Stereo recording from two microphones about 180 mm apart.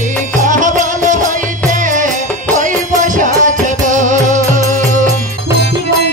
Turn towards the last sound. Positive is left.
turn(degrees=-45)  # may be behind; listen again after turning